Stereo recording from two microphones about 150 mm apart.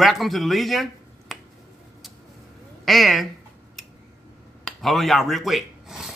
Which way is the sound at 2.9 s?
Centre (ahead or behind).